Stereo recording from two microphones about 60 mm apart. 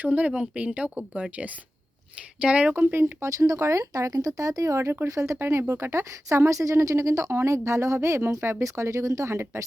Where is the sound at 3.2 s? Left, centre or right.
Right.